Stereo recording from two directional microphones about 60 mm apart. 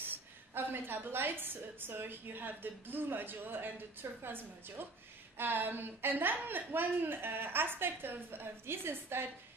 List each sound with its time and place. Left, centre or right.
0.6 s a woman's voice: right